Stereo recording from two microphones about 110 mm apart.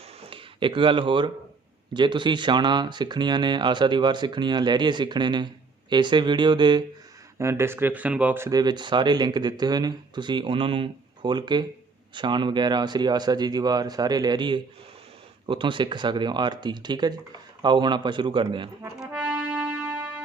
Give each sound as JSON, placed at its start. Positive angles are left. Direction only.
{"t": 0.3, "sound": "speech", "side_deg": -50}
{"t": 7.3, "sound": "speech", "side_deg": -25}
{"t": 8.4, "sound": "speech", "side_deg": -40}
{"t": 18.9, "sound": "music", "side_deg": -10}